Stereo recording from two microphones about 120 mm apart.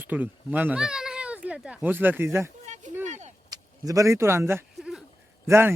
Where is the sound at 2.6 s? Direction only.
80° right.